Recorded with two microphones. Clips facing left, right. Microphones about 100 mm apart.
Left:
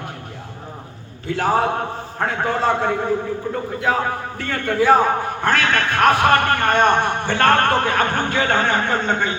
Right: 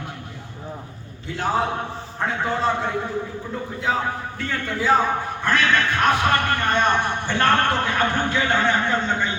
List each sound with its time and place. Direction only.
1.3 s a man's voice: 75° left (ahead or behind)
2.1 s a man's voice: 55° left (ahead or behind)
4.4 s a man's voice: 60° left (ahead or behind)